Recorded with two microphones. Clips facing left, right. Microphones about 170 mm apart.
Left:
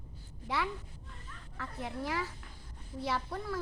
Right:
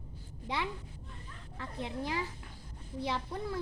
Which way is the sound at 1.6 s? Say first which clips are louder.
Right 1 dB; 20° right (ahead or behind).